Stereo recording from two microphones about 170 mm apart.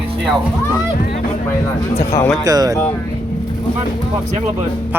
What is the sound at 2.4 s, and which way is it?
Speech, 20° right (ahead or behind).